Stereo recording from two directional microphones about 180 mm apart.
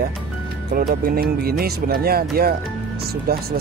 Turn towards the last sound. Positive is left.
turn(degrees=-60)  # may be behind; listen again after turning